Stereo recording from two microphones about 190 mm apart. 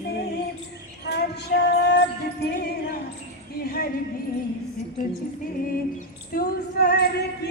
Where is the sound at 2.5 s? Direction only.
55° left (ahead or behind).